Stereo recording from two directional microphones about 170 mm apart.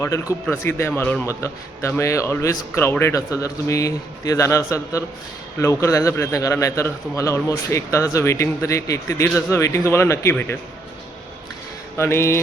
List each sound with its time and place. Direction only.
0.4 s a man's voice: 15° left (ahead or behind)
11.9 s a man's voice: 15° left (ahead or behind)